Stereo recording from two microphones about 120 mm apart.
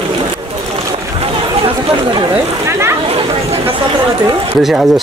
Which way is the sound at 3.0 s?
55° right (ahead or behind).